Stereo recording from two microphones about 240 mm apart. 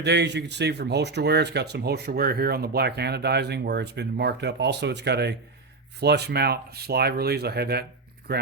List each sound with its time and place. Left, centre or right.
0.0 s speech: right